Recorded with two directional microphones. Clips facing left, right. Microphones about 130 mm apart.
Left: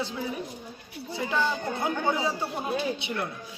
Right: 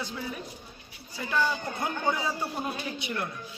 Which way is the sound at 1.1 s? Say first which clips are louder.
Left 1 dB; 25° left (ahead or behind).